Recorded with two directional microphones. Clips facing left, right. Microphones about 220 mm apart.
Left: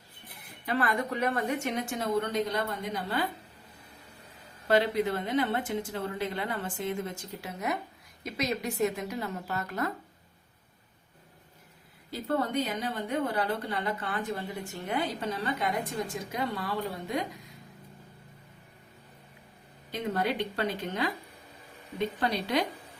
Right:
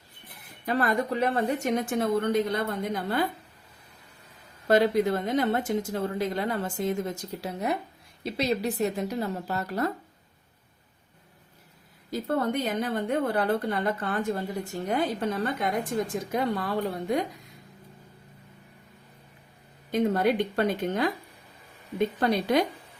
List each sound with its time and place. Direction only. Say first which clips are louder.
0.6 s a woman's voice: right 3 dB; 40° right (ahead or behind)
4.7 s speech: right 4 dB; 45° right (ahead or behind)
12.7 s a woman's voice: right 5 dB; 55° right (ahead or behind)
19.9 s a woman's voice: right 7 dB; 50° right (ahead or behind)